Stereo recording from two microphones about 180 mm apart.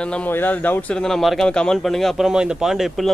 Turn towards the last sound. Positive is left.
turn(degrees=0)  # may be behind; listen again after turning